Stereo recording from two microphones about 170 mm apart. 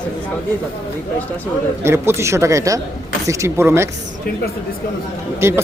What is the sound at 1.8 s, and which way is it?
Speech, 15° right (ahead or behind).